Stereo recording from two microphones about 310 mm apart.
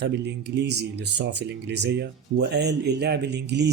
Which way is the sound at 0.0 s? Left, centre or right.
Right.